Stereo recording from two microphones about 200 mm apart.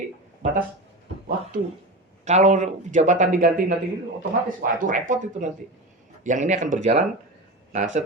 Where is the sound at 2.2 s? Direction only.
35° right (ahead or behind).